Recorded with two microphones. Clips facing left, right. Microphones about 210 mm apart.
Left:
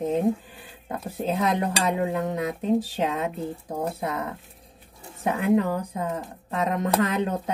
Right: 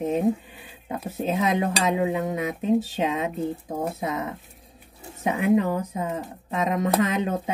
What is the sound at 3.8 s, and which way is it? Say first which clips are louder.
Speech: even; 5° right (ahead or behind).